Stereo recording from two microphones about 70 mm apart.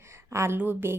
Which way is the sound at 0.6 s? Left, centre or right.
Right.